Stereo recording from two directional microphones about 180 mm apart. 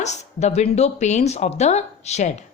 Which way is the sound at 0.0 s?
40° left (ahead or behind).